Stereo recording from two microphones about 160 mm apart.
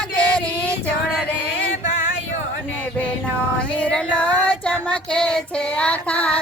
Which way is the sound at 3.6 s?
5° left (ahead or behind).